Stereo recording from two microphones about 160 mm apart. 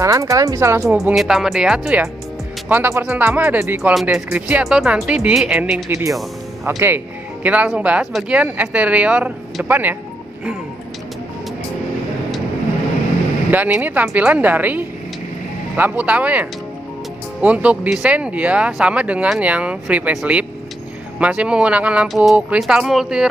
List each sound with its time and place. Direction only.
0.0 s speech: 20° right (ahead or behind)
1.0 s speech: centre (ahead or behind)
3.9 s speech: 5° right (ahead or behind)
5.9 s speech: 20° right (ahead or behind)
7.4 s speech: 10° right (ahead or behind)
13.5 s speech: 10° right (ahead or behind)